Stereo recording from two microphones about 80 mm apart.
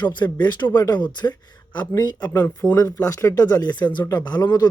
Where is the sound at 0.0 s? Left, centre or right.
Left.